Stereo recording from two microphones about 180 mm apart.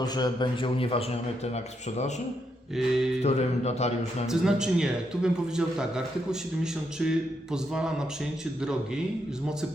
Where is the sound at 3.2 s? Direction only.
35° left (ahead or behind).